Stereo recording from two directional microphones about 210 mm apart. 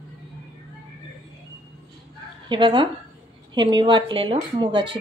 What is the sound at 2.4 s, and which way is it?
Speech, 20° right (ahead or behind).